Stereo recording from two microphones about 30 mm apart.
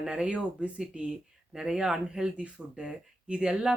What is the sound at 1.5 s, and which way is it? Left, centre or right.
Speech, right.